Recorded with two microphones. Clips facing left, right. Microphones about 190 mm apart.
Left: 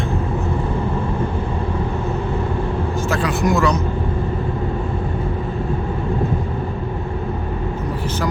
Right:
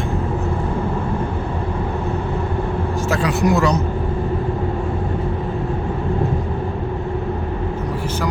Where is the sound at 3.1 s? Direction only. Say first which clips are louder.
Right 2 dB; 35° right (ahead or behind).